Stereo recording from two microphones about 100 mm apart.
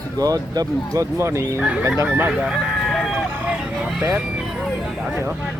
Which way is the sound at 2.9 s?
Centre (ahead or behind).